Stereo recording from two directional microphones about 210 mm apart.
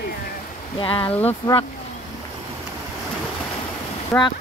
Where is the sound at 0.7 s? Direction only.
25° left (ahead or behind).